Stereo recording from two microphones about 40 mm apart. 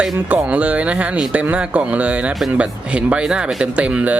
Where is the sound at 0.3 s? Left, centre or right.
Right.